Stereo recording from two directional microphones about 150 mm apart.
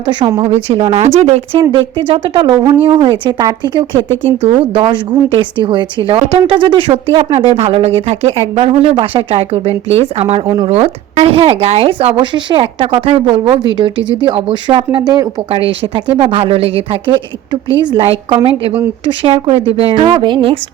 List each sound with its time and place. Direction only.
0.3 s speech: 40° right (ahead or behind)
1.7 s speech: 35° right (ahead or behind)
15.4 s speech: 40° right (ahead or behind)